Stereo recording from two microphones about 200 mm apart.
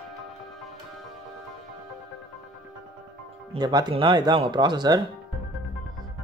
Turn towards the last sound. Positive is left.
turn(degrees=-20)  # may be behind; listen again after turning